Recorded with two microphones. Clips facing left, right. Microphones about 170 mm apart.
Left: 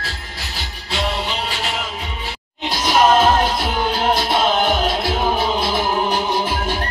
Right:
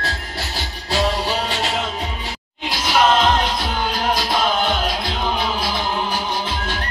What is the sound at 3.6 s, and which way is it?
Music, 25° left (ahead or behind).